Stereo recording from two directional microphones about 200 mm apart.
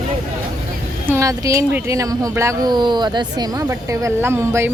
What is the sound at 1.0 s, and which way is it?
Speech, 15° right (ahead or behind).